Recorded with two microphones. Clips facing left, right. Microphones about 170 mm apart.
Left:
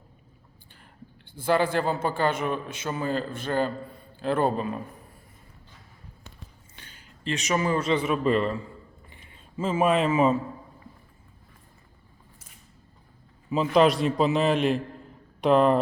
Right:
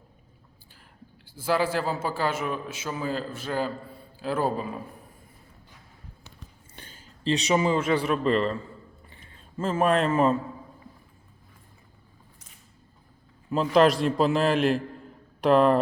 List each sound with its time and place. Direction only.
1.2 s a man's voice: 5° right (ahead or behind)
7.3 s speech: 35° right (ahead or behind)
7.5 s a man's voice: 20° right (ahead or behind)
8.0 s a man's voice: 5° left (ahead or behind)
9.6 s a man's voice: 5° left (ahead or behind)
13.5 s a man's voice: centre (ahead or behind)